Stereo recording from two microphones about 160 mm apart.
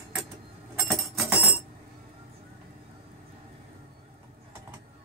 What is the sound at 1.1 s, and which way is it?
Music, 15° right (ahead or behind).